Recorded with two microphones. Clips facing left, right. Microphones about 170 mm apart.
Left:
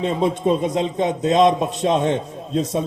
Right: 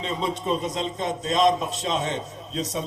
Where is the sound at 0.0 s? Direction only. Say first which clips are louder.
Left 8 dB; 55° left (ahead or behind).